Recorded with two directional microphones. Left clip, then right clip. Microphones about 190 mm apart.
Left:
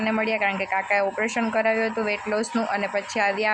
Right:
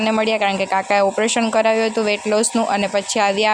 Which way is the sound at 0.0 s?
35° right (ahead or behind).